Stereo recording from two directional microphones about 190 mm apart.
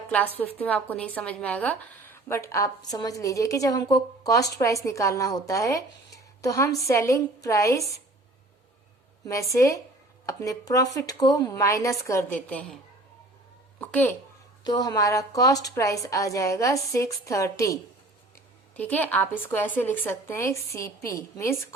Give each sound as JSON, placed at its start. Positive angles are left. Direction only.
{"t": 0.1, "sound": "a woman's voice", "side_deg": 10}
{"t": 9.2, "sound": "a woman's voice", "side_deg": 15}
{"t": 13.7, "sound": "a child's voice", "side_deg": 10}
{"t": 14.6, "sound": "a woman's voice", "side_deg": 20}
{"t": 18.8, "sound": "a woman's voice", "side_deg": 10}